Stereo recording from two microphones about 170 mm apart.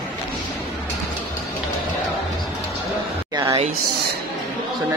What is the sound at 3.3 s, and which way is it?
Speech, 20° right (ahead or behind).